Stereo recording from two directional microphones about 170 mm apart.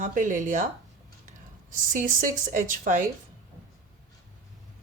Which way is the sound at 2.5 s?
50° right (ahead or behind).